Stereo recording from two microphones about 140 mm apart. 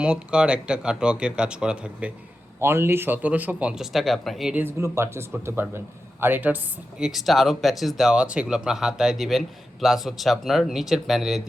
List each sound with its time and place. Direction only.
0.0 s speech: 5° right (ahead or behind)
4.6 s speech: 20° right (ahead or behind)
7.0 s speech: centre (ahead or behind)